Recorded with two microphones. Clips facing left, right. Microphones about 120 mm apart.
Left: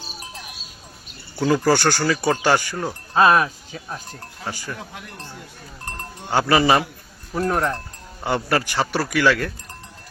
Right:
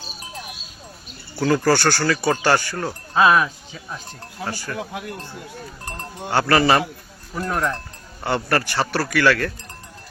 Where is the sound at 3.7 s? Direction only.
45° left (ahead or behind).